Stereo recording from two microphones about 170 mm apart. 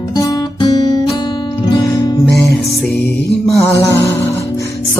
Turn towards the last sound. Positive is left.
turn(degrees=15)  # may be behind; listen again after turning